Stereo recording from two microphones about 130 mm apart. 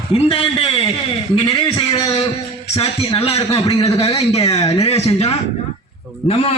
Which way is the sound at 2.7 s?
50° left (ahead or behind).